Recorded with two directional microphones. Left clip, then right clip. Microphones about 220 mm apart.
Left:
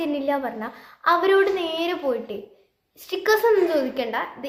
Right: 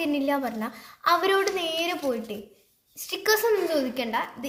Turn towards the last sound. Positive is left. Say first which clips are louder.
# left 3 dB
turn(degrees=-45)  # may be behind; listen again after turning